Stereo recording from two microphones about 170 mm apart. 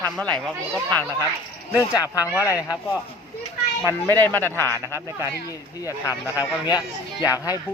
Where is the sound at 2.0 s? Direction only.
20° left (ahead or behind).